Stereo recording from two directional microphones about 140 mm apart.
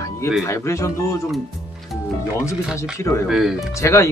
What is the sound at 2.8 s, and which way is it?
Speech, 20° left (ahead or behind).